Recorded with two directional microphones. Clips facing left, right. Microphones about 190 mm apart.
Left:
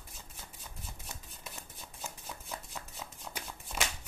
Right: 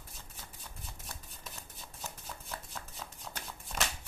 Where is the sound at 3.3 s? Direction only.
10° left (ahead or behind).